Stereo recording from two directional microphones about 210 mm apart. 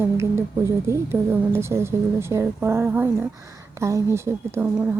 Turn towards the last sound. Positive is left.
turn(degrees=-10)  # may be behind; listen again after turning